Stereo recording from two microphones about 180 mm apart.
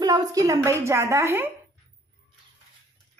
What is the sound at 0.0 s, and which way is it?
A woman's voice, 20° right (ahead or behind).